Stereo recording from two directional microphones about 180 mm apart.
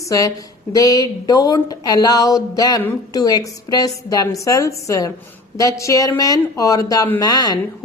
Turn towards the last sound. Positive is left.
turn(degrees=20)  # may be behind; listen again after turning